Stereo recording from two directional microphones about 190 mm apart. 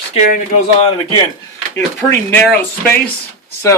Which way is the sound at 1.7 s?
10° left (ahead or behind).